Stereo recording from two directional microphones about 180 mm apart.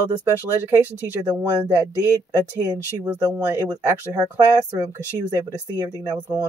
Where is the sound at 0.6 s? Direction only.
15° right (ahead or behind).